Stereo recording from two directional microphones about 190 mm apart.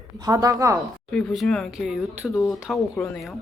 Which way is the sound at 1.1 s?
5° left (ahead or behind).